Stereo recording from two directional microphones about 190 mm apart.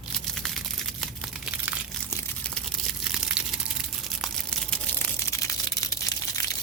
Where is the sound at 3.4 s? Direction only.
5° right (ahead or behind).